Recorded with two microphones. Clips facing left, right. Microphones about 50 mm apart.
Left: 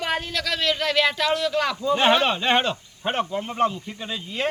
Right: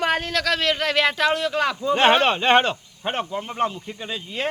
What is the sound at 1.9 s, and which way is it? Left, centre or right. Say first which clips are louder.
Speech: right 3 dB; right.